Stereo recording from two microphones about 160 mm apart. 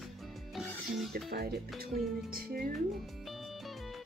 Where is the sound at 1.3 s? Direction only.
75° right (ahead or behind).